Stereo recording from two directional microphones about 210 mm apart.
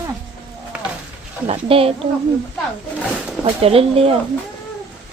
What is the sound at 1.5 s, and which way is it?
Speech, 25° right (ahead or behind).